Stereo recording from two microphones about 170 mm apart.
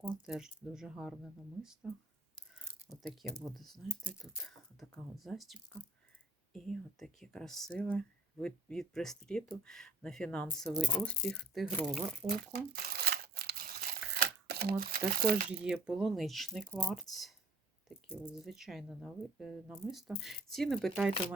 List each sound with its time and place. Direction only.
0.3 s speech: 5° right (ahead or behind)
4.8 s speech: centre (ahead or behind)
12.5 s crumpling: 65° right (ahead or behind)
15.6 s speech: 5° right (ahead or behind)